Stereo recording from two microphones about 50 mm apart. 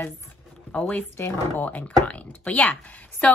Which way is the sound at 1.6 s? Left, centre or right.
Left.